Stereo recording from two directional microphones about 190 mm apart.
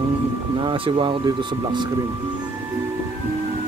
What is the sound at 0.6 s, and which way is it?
Speech, 25° right (ahead or behind).